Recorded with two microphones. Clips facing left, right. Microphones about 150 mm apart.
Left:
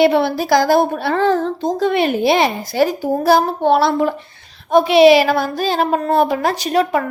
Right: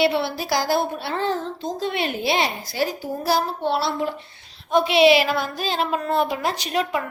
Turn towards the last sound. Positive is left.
turn(degrees=45)  # may be behind; listen again after turning